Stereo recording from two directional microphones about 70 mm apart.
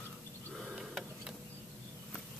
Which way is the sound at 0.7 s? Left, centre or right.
Centre.